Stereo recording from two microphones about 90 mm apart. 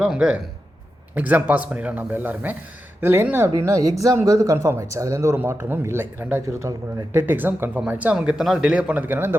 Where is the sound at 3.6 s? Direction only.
40° right (ahead or behind).